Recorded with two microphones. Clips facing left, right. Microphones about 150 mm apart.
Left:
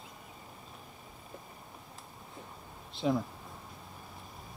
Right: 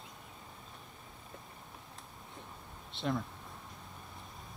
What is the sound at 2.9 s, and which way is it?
Speech, centre (ahead or behind).